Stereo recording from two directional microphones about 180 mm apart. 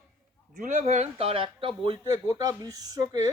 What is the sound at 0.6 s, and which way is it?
Speech, 45° right (ahead or behind).